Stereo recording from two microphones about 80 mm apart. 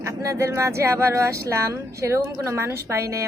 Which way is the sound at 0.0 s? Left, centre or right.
Right.